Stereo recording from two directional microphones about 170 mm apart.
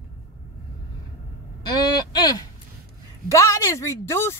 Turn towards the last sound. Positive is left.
turn(degrees=15)  # may be behind; listen again after turning